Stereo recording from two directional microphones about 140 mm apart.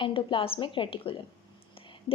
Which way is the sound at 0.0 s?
40° left (ahead or behind).